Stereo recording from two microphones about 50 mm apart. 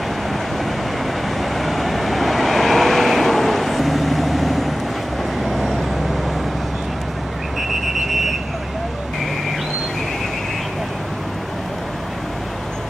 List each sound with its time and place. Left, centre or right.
1.4 s vehicle: centre
7.9 s vehicle: centre